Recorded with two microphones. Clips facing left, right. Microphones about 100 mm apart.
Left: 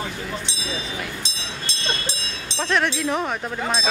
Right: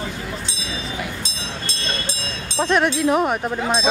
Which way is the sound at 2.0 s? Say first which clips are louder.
Right 2 dB; 45° right (ahead or behind).